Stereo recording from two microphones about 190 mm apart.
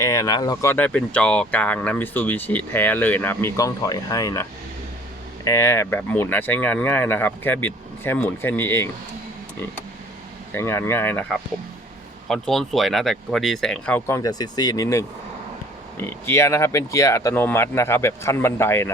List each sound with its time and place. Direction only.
0.0 s speech: 15° left (ahead or behind)
5.5 s speech: 15° left (ahead or behind)
10.5 s speech: 15° left (ahead or behind)
14.2 s speech: 20° left (ahead or behind)